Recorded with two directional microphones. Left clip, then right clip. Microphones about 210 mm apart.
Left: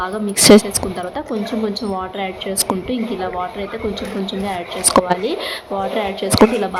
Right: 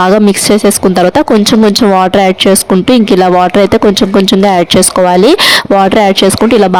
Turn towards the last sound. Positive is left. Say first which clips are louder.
# right 15 dB
turn(degrees=-50)  # may be behind; listen again after turning